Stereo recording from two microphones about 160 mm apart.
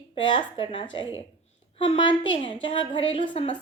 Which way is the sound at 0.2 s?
30° left (ahead or behind).